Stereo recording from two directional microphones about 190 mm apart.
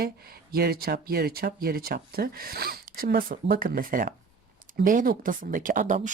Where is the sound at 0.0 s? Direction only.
50° right (ahead or behind).